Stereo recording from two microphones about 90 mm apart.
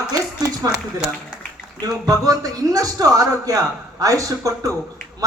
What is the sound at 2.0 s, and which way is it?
A man's voice, 45° right (ahead or behind).